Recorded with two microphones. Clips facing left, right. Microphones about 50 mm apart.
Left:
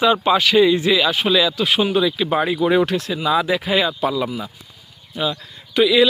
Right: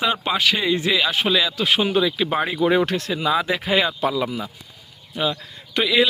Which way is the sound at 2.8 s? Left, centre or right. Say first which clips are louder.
Left 2 dB; right.